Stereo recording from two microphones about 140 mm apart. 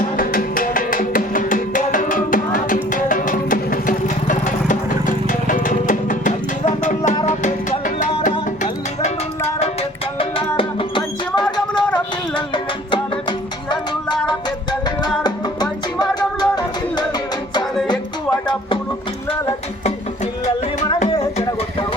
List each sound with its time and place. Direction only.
0.0 s music: 80° left; by 8.3 s 60° left (ahead or behind)
10.6 s music: 40° left (ahead or behind)
11.3 s a sound: 30° left (ahead or behind)
13.7 s music: 30° left (ahead or behind)